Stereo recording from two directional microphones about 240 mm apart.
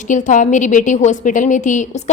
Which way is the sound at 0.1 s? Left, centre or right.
Left.